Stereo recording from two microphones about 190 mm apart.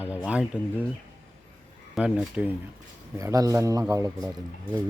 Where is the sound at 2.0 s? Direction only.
5° right (ahead or behind).